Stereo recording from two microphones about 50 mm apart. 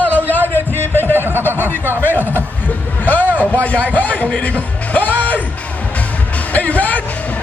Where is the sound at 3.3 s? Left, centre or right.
Left.